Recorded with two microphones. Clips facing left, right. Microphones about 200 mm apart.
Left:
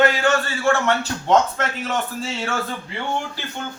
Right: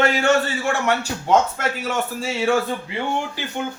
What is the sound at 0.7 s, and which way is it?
A man's voice, 10° right (ahead or behind).